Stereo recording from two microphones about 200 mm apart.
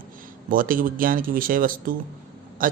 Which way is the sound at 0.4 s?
45° right (ahead or behind).